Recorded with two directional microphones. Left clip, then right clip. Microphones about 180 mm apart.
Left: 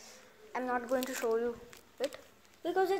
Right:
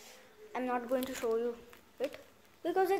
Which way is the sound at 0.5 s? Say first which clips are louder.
Left 1 dB; 10° right (ahead or behind).